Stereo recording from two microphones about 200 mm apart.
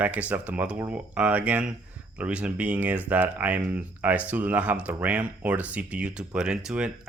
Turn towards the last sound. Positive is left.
turn(degrees=-5)  # may be behind; listen again after turning